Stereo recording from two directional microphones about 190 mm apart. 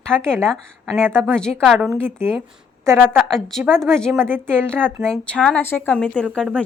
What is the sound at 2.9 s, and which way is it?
Speech, 10° right (ahead or behind).